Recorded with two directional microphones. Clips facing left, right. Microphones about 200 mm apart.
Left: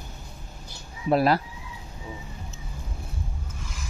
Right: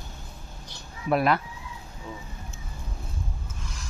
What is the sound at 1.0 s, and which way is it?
Speech, 30° left (ahead or behind).